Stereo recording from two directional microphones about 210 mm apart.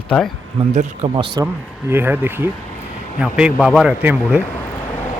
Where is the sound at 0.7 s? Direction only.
25° right (ahead or behind).